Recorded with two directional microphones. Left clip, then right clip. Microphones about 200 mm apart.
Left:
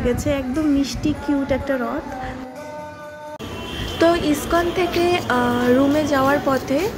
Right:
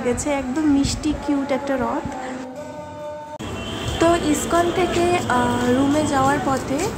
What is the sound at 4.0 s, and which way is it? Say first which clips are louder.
Speech: left 1 dB; 10° left (ahead or behind).